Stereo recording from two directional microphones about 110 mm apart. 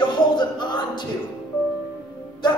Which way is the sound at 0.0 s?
45° left (ahead or behind).